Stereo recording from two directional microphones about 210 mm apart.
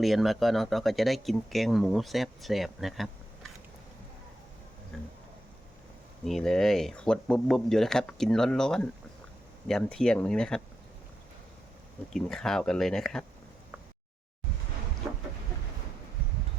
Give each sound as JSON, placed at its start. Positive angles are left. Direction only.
{"t": 0.0, "sound": "speech", "side_deg": 0}
{"t": 4.9, "sound": "a sound", "side_deg": 0}
{"t": 6.2, "sound": "speech", "side_deg": 0}
{"t": 12.1, "sound": "speech", "side_deg": 0}